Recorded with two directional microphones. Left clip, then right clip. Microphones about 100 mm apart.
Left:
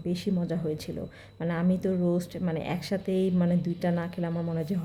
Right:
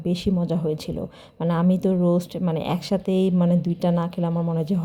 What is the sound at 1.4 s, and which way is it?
A woman's voice, 55° right (ahead or behind).